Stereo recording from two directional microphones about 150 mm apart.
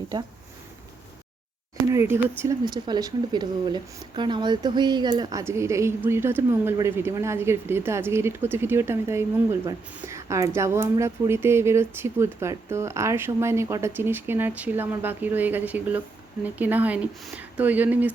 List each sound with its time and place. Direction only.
1.9 s speech: 15° right (ahead or behind)